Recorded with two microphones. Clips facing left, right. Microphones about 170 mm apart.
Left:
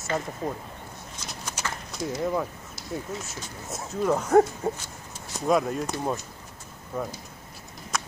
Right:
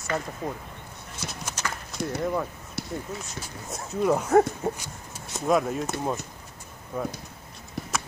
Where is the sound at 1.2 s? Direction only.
65° right (ahead or behind).